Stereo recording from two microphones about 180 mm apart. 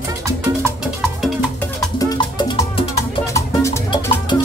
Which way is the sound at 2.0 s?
25° left (ahead or behind).